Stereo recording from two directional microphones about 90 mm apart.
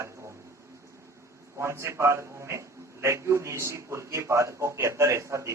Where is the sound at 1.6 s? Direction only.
30° right (ahead or behind).